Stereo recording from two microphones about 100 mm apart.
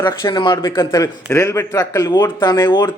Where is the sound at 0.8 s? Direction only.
35° left (ahead or behind).